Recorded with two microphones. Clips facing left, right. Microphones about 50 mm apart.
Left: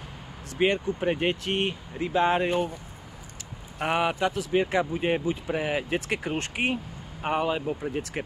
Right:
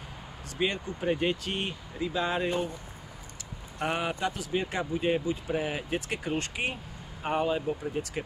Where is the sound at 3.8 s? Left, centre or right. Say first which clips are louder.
Left 5 dB; left.